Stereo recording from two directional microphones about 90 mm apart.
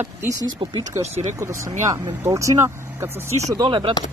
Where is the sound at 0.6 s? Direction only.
55° right (ahead or behind).